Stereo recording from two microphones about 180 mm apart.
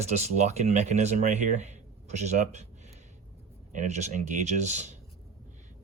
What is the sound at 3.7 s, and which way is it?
Speech, 40° right (ahead or behind).